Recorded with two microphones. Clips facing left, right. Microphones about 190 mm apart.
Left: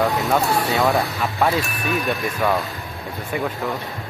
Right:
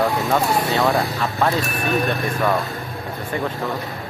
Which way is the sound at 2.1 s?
10° left (ahead or behind).